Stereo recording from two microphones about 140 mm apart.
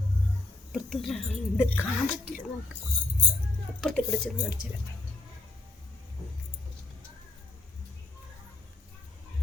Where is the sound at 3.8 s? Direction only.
5° left (ahead or behind).